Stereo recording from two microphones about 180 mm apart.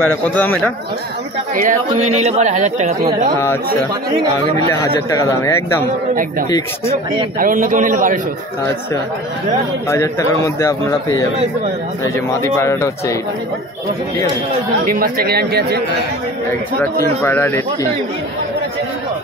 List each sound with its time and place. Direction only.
0.0 s a man's voice: 10° left (ahead or behind)
1.5 s speech: 45° right (ahead or behind)
4.6 s a man's voice: 15° left (ahead or behind)
7.3 s a man's voice: 45° right (ahead or behind)
9.8 s a man's voice: 15° left (ahead or behind)
12.4 s a man's voice: 15° left (ahead or behind)
14.9 s speech: 55° right (ahead or behind)
17.0 s a man's voice: 15° left (ahead or behind)